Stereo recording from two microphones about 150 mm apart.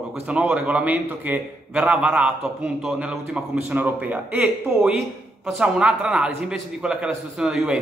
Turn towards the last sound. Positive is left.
turn(degrees=-5)  # may be behind; listen again after turning